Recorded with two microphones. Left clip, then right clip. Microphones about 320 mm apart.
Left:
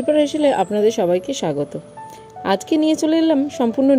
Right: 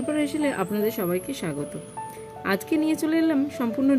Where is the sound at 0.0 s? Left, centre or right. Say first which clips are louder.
Left 10 dB; centre.